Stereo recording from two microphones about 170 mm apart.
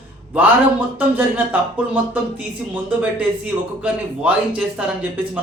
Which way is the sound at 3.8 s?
5° right (ahead or behind).